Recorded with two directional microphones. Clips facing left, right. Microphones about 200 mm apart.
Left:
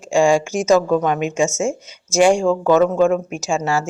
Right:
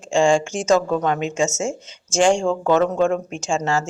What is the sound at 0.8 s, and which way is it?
Speech, 10° left (ahead or behind).